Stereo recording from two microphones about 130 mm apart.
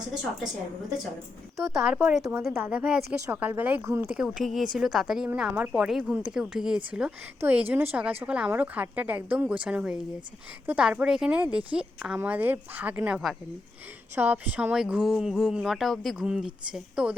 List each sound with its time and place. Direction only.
1.5 s a woman's voice: centre (ahead or behind); by 4.1 s 20° right (ahead or behind)
4.1 s a woman's voice: 5° right (ahead or behind)